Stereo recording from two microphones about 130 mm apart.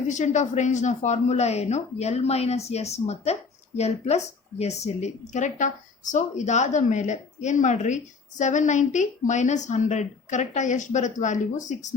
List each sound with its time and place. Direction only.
0.1 s a woman's voice: 70° left (ahead or behind)